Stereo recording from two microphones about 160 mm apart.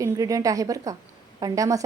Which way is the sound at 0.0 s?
20° right (ahead or behind).